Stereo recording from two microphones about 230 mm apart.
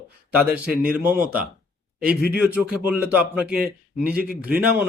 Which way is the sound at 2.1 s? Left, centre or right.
Left.